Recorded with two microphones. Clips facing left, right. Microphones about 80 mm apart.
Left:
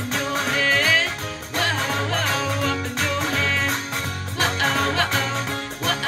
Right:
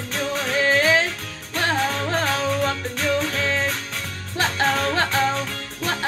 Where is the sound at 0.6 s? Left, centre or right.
Right.